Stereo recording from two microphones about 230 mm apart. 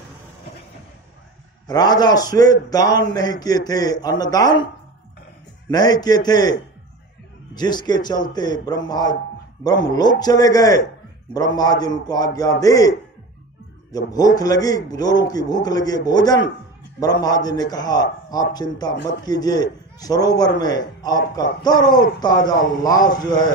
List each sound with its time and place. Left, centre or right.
1.7 s a man's voice: centre
5.7 s a man's voice: centre
13.9 s a man's voice: centre